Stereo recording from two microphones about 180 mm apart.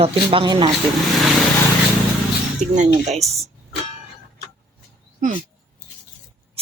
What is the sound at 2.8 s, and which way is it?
Speech, 40° right (ahead or behind).